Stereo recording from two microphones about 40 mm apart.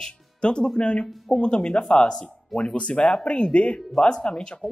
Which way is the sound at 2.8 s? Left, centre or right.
Left.